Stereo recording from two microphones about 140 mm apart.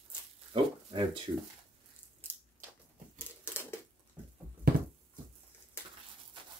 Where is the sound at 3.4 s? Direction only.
15° left (ahead or behind).